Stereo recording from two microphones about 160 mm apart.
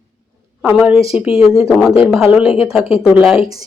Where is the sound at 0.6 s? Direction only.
10° right (ahead or behind).